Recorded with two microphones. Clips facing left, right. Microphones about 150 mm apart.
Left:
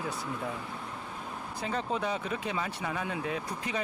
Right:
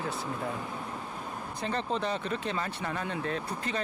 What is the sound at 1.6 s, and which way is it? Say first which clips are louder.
Speech: right 1 dB; 10° left (ahead or behind).